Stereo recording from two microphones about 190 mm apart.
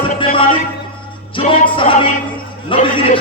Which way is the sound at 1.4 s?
25° left (ahead or behind).